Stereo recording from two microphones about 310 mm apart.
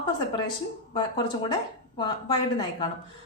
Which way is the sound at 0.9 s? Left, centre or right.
Centre.